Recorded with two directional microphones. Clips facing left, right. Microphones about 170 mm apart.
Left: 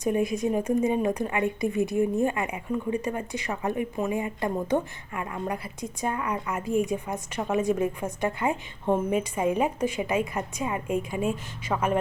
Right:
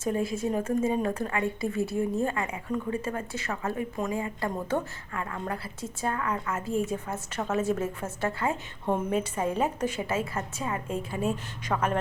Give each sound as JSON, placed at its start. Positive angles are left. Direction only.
{"t": 0.0, "sound": "a woman's voice", "side_deg": 15}